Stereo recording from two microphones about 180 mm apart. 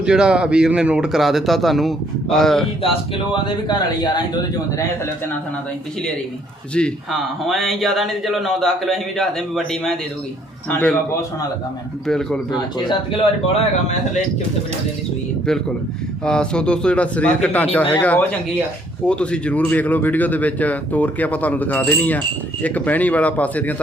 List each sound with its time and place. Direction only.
0.0 s speech: 5° right (ahead or behind)
3.4 s speech: 25° left (ahead or behind)
6.7 s speech: 5° left (ahead or behind)
12.0 s speech: 5° left (ahead or behind)
12.5 s speech: 25° left (ahead or behind)
15.5 s speech: 5° left (ahead or behind)